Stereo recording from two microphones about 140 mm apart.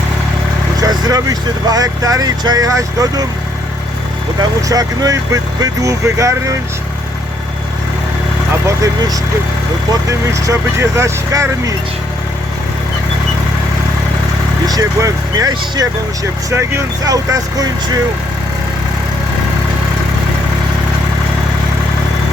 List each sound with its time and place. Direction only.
0.8 s speech: 25° right (ahead or behind)
4.7 s speech: 25° right (ahead or behind)
9.9 s speech: 25° right (ahead or behind)
14.7 s speech: 25° right (ahead or behind)